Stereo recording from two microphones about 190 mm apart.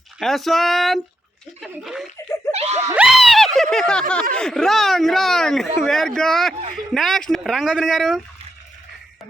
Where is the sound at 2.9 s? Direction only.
5° right (ahead or behind).